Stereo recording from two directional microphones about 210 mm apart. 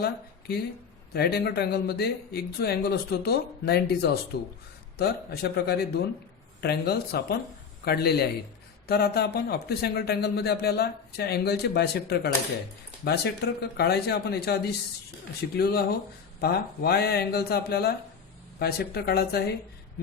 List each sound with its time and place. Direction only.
0.0 s speech: 50° left (ahead or behind)